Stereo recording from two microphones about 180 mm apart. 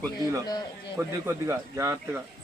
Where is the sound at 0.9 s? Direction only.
15° right (ahead or behind).